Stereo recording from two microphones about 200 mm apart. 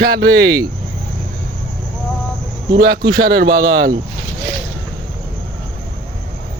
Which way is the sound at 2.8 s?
55° right (ahead or behind).